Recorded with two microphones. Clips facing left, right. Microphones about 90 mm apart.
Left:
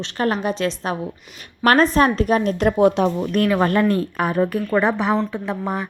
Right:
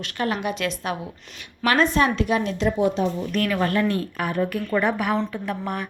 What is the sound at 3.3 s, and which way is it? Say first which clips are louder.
A woman's voice: left 5 dB; 40° left (ahead or behind).